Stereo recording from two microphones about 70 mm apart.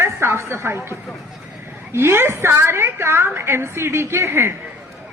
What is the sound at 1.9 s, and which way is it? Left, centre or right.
A man's voice, right.